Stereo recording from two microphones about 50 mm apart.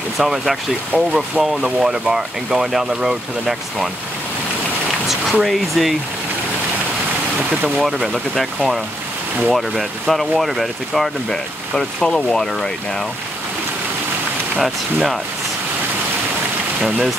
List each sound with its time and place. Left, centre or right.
0.2 s speech: centre
0.9 s speech: centre
1.4 s speech: centre
5.0 s speech: centre
7.8 s speech: centre
11.2 s speech: centre
14.6 s speech: centre